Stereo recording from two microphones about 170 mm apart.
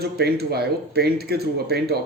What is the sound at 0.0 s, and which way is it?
Speech, 70° right (ahead or behind).